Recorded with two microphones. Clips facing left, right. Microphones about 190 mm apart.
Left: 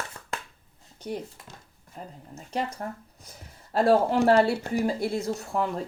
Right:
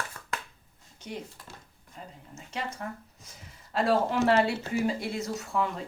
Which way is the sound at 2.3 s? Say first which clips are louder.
Left 5 dB; 35° left (ahead or behind).